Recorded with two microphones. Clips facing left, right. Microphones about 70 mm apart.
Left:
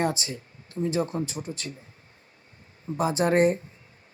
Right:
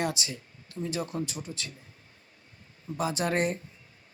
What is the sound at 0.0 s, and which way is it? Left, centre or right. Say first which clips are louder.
Speech: left 4 dB; left.